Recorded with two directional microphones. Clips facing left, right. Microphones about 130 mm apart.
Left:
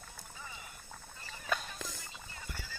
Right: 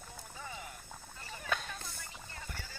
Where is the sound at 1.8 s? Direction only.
90° left.